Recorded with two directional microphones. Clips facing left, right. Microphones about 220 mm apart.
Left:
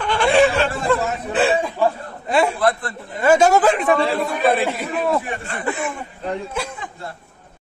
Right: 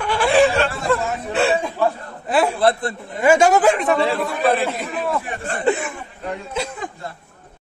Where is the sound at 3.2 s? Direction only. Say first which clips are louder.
Even; 15° right (ahead or behind).